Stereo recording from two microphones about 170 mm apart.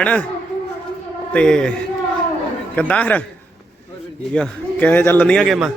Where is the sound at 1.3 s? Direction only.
5° left (ahead or behind).